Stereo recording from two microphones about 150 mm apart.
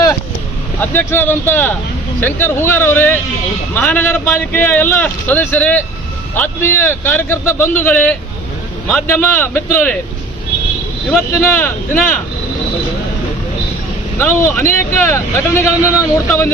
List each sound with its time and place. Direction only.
0.8 s speech: 15° left (ahead or behind)
11.1 s speech: 15° left (ahead or behind)
14.2 s speech: 15° left (ahead or behind)